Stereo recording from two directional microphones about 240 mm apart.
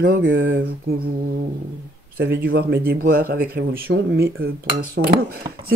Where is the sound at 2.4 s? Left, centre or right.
Right.